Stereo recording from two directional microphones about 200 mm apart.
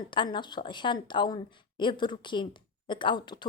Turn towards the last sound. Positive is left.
turn(degrees=20)  # may be behind; listen again after turning